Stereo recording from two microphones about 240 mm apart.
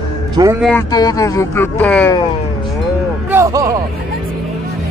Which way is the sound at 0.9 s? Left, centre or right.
Centre.